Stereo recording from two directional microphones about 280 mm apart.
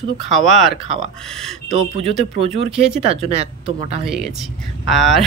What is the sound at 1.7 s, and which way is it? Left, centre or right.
Speech, right.